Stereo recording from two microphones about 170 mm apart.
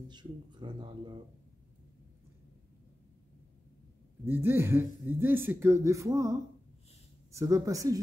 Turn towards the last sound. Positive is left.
turn(degrees=-20)  # may be behind; listen again after turning